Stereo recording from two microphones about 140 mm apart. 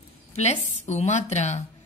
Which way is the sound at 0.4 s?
55° left (ahead or behind).